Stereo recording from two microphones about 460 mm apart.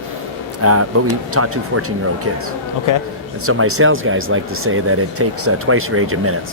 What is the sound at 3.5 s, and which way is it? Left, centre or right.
Speech, right.